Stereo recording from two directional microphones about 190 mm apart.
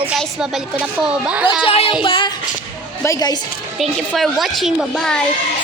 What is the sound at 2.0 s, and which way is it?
Child singing, 25° left (ahead or behind).